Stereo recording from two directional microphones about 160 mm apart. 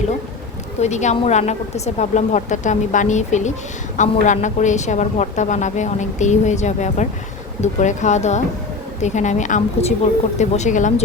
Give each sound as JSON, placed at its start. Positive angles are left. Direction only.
{"t": 0.8, "sound": "speech", "side_deg": 45}